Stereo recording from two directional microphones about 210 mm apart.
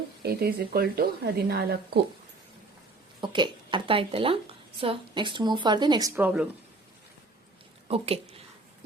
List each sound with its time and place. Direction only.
0.2 s speech: 45° right (ahead or behind)
3.2 s speech: 20° right (ahead or behind); by 6.5 s 5° right (ahead or behind)
7.9 s speech: 30° right (ahead or behind)